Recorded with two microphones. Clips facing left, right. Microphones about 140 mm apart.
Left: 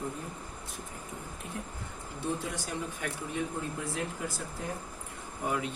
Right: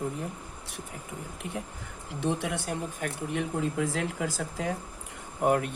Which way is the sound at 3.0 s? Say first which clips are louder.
Right 3 dB; 45° right (ahead or behind).